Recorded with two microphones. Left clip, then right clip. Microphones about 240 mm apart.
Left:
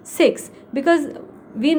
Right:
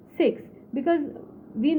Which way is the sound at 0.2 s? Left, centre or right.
Left.